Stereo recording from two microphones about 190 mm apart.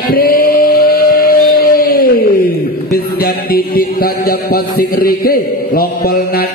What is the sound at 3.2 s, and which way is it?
Mantra, 55° left (ahead or behind).